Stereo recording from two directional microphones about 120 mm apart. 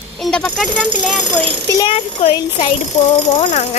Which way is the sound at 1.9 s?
55° left (ahead or behind).